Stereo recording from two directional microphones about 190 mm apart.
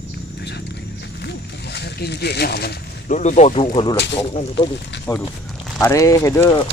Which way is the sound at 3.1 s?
40° left (ahead or behind).